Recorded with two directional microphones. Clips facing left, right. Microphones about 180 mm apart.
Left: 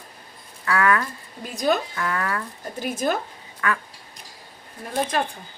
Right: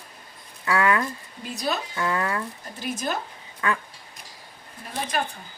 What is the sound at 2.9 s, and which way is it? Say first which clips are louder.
Speech: left 5 dB; 55° left (ahead or behind).